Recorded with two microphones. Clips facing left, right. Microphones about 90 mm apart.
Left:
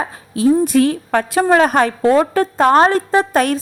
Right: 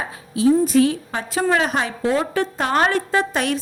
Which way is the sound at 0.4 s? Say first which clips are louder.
Left 2 dB; 50° left (ahead or behind).